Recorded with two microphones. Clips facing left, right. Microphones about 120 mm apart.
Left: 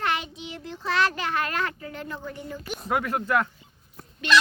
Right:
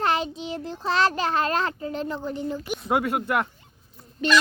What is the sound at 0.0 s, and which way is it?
A child's voice, 35° right (ahead or behind).